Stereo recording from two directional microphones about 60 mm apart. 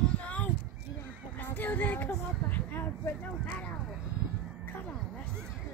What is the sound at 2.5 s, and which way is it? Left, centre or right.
Speech, left.